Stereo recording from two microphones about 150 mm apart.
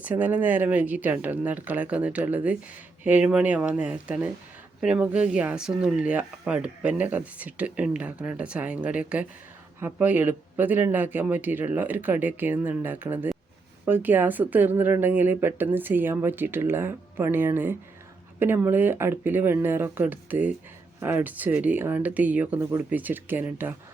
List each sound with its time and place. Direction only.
0.0 s speech: 10° right (ahead or behind)